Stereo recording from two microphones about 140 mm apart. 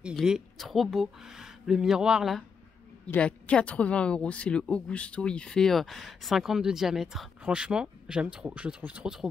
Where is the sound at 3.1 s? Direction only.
10° left (ahead or behind).